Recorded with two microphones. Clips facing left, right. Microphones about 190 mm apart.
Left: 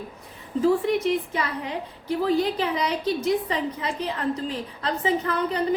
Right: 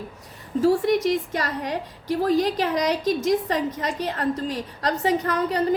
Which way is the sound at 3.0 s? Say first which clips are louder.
Right 2 dB; 90° right.